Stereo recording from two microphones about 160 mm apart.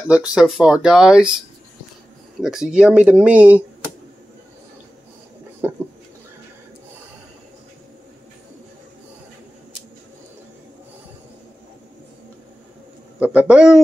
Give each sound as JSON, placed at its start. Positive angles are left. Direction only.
{"t": 0.1, "sound": "speech", "side_deg": -5}
{"t": 2.4, "sound": "speech", "side_deg": -5}
{"t": 5.6, "sound": "bird", "side_deg": -15}
{"t": 13.2, "sound": "speech", "side_deg": -10}